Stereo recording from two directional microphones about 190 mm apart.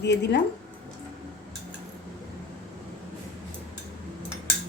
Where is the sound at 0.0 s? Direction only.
60° left (ahead or behind).